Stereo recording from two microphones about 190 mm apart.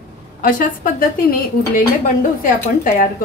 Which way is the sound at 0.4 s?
45° left (ahead or behind).